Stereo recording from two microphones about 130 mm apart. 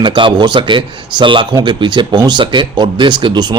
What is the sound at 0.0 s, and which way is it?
Speech, 40° right (ahead or behind).